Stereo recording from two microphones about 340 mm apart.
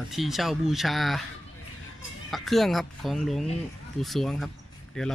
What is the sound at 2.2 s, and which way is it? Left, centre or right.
Speech, centre.